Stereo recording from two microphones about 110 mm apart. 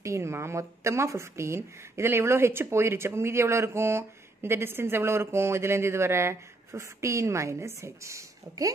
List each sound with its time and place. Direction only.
0.0 s speech: 25° right (ahead or behind)